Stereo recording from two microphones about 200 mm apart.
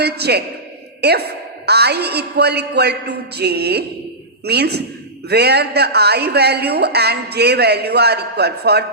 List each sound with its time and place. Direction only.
0.0 s a woman's voice: 55° right (ahead or behind)